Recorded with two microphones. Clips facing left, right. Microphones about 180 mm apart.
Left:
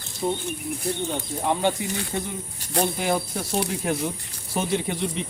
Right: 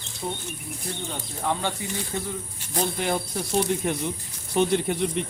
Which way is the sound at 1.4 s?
20° left (ahead or behind).